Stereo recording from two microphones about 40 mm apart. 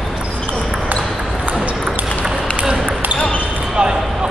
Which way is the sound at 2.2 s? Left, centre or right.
Right.